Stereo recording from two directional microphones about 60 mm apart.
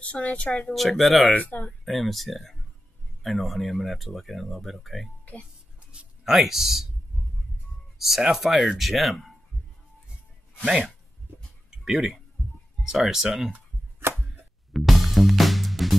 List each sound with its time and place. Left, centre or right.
0.0 s a woman's voice: left
0.7 s speech: centre
1.3 s a woman's voice: left
1.9 s speech: centre
6.2 s speech: centre
8.0 s speech: centre
11.8 s speech: centre
14.0 s chopping: right
14.7 s music: centre